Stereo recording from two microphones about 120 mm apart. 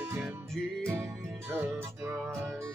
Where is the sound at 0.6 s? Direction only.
5° left (ahead or behind).